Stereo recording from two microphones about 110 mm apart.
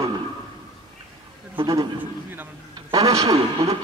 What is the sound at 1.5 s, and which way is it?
Speech, 40° right (ahead or behind).